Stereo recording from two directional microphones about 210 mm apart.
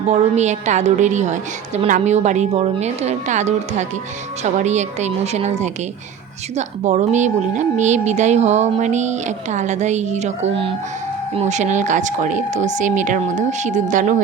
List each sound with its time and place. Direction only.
0.1 s a woman's voice: 35° right (ahead or behind)